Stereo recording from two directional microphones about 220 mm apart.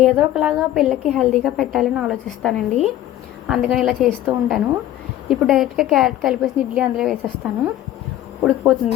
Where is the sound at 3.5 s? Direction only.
5° right (ahead or behind).